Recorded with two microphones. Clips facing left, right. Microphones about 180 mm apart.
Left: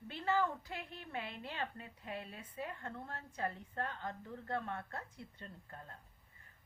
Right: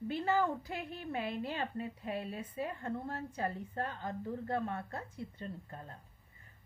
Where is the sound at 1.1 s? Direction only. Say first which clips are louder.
Right 7 dB; 40° right (ahead or behind).